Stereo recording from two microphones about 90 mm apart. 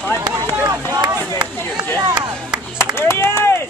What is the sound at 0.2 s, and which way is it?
Run, 40° right (ahead or behind).